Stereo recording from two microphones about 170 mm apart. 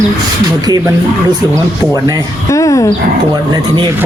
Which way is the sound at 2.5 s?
20° left (ahead or behind).